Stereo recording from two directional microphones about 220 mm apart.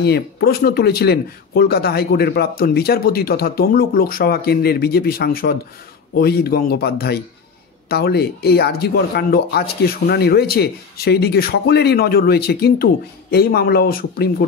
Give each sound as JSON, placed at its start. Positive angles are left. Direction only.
{"t": 0.0, "sound": "speech", "side_deg": 45}